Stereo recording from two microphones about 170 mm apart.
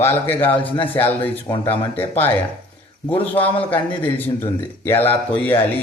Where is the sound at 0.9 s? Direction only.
10° left (ahead or behind).